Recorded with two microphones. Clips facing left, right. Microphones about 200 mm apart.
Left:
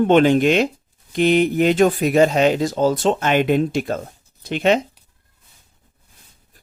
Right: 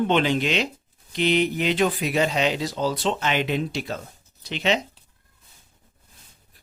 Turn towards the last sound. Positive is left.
turn(degrees=50)  # may be behind; listen again after turning